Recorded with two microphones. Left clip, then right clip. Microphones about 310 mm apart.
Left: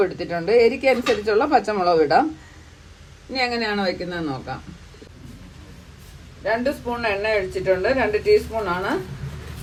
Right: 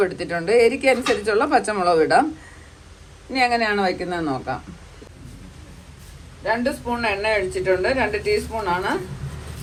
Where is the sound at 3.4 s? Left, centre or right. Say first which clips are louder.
Right 4 dB; centre.